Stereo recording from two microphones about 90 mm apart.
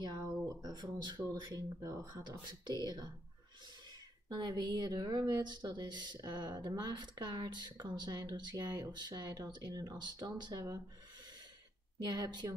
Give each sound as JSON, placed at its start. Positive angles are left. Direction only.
{"t": 0.0, "sound": "speech", "side_deg": -50}
{"t": 4.3, "sound": "speech", "side_deg": -50}
{"t": 10.5, "sound": "speech", "side_deg": -40}
{"t": 12.0, "sound": "speech", "side_deg": -50}